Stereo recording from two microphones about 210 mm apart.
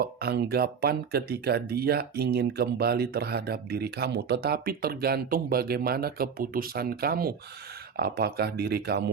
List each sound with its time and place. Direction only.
0.0 s speech: 50° right (ahead or behind)